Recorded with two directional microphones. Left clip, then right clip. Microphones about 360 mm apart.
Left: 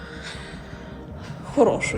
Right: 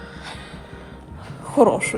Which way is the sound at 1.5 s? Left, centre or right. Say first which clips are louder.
Right 3 dB; centre.